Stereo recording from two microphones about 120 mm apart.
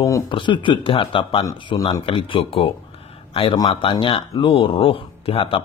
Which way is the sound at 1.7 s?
30° left (ahead or behind).